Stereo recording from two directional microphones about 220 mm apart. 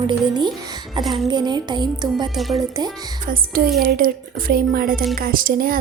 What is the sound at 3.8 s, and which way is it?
Speech, 40° right (ahead or behind).